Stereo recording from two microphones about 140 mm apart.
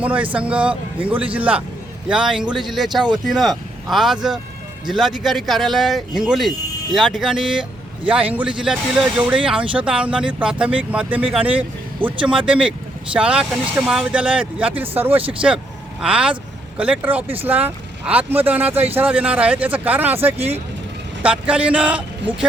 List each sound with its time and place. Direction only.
0.0 s speech: 10° right (ahead or behind)